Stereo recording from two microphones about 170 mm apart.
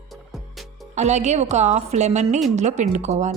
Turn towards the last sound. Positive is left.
turn(degrees=-40)  # may be behind; listen again after turning